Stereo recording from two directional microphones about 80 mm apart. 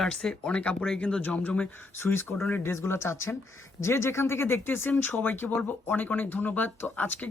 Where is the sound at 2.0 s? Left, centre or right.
Left.